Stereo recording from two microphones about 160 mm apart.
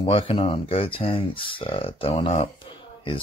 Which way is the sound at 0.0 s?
35° left (ahead or behind).